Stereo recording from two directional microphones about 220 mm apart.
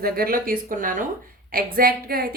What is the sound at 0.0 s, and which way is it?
A woman's voice, 40° right (ahead or behind).